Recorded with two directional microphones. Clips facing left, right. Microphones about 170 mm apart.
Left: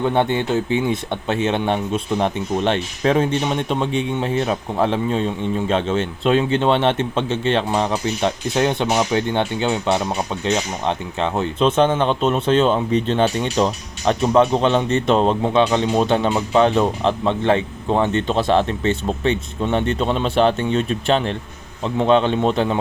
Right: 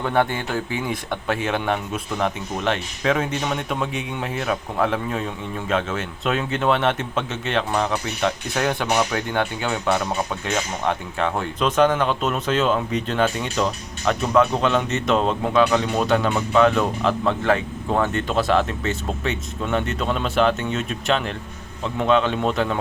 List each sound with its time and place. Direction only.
0.0 s speech: 20° left (ahead or behind)